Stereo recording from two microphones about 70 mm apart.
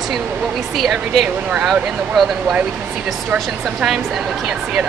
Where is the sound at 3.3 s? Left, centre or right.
Centre.